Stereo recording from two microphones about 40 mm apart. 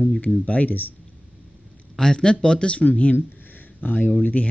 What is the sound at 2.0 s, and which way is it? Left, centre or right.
Speech, centre.